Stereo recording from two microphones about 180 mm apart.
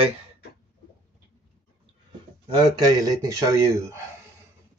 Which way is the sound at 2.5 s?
20° right (ahead or behind).